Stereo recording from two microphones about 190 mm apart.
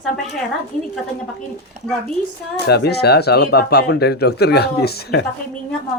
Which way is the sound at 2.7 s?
60° left (ahead or behind).